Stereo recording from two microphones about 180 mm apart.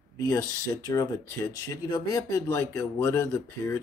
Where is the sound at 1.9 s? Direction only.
15° left (ahead or behind).